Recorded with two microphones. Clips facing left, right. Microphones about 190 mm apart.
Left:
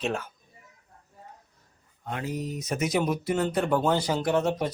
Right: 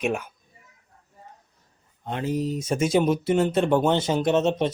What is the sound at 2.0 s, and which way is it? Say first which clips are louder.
Speech: right 6 dB; 25° right (ahead or behind).